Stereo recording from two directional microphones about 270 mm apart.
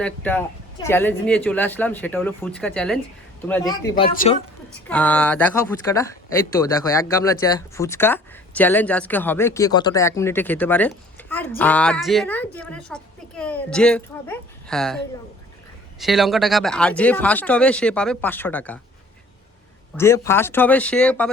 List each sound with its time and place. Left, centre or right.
0.0 s speech: centre
4.1 s a woman's voice: left
4.9 s speech: centre
20.0 s speech: centre